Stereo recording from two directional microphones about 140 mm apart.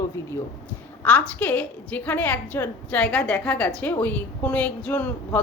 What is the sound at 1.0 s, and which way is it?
A woman's voice, 10° left (ahead or behind).